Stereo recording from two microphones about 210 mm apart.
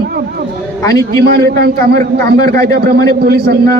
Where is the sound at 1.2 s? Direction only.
50° right (ahead or behind).